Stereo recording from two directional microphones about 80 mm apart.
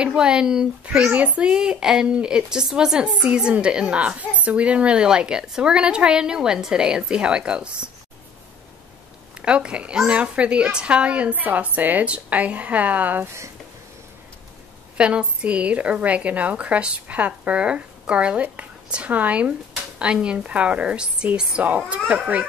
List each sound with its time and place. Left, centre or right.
0.0 s a woman's voice: centre
9.4 s a woman's voice: centre
15.0 s a woman's voice: centre